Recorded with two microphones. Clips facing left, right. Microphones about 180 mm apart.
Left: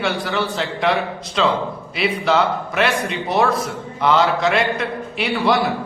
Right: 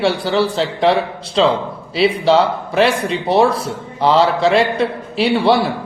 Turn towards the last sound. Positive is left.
turn(degrees=-30)  # may be behind; listen again after turning